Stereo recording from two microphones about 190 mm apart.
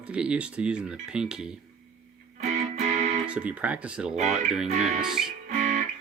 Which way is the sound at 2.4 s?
35° right (ahead or behind).